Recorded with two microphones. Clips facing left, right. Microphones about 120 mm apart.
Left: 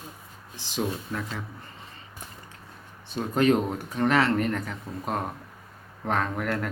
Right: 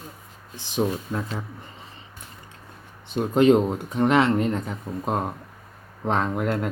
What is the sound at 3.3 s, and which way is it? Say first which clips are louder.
Speech: right 5 dB; 20° right (ahead or behind).